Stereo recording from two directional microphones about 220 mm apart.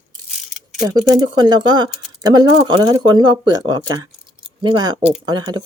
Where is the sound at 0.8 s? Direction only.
15° right (ahead or behind).